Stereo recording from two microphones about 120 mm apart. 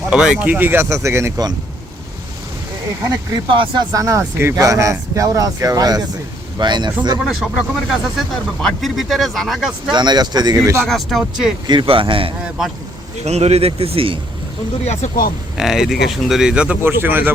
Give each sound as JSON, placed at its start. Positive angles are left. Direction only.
{"t": 0.1, "sound": "speech", "side_deg": -10}
{"t": 3.5, "sound": "speech", "side_deg": -45}
{"t": 3.9, "sound": "speech", "side_deg": -25}
{"t": 7.3, "sound": "speech", "side_deg": 0}
{"t": 9.9, "sound": "speech", "side_deg": -35}
{"t": 10.8, "sound": "speech", "side_deg": 0}
{"t": 11.6, "sound": "speech", "side_deg": -40}
{"t": 12.4, "sound": "speech", "side_deg": -5}
{"t": 13.2, "sound": "speech", "side_deg": -65}
{"t": 15.5, "sound": "speech", "side_deg": -5}